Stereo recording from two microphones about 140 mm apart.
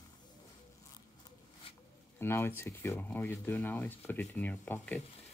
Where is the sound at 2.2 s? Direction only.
15° left (ahead or behind).